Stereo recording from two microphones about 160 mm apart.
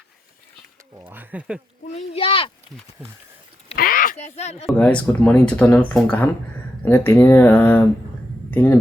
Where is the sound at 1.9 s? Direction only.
40° left (ahead or behind).